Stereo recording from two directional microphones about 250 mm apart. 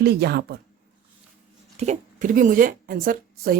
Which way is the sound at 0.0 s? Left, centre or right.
Right.